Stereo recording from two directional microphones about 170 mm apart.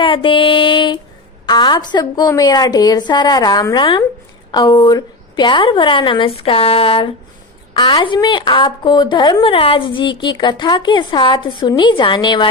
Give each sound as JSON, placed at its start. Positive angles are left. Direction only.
{"t": 0.0, "sound": "a woman's voice", "side_deg": 30}